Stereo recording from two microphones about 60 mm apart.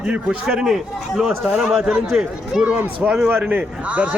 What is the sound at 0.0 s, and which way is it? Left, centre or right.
A man's voice, centre.